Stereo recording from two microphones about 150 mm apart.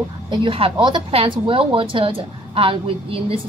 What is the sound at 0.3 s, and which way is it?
A woman's voice, 35° right (ahead or behind).